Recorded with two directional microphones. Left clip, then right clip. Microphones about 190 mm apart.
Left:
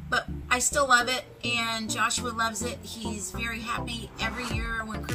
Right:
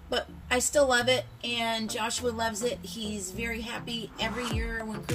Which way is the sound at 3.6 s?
50° left (ahead or behind).